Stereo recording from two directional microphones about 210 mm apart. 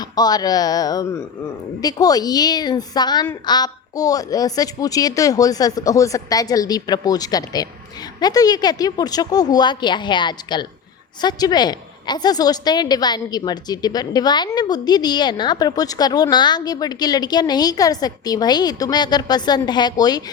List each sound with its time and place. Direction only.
0.0 s a woman's voice: 20° left (ahead or behind)